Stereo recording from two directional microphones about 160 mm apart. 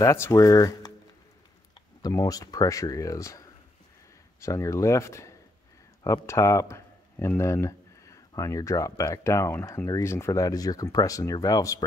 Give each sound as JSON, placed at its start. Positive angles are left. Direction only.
{"t": 0.0, "sound": "speech", "side_deg": 15}
{"t": 2.0, "sound": "speech", "side_deg": 25}